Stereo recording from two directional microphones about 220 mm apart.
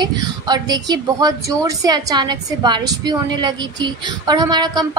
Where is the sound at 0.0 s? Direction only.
20° right (ahead or behind).